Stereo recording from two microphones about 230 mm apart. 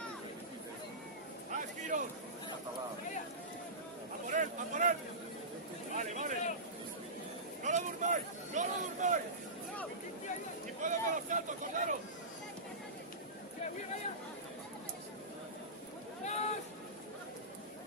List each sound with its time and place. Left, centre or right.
1.9 s speech: right
4.4 s speech: right
5.9 s speech: right
7.6 s speech: right
10.8 s speech: right
16.3 s speech: left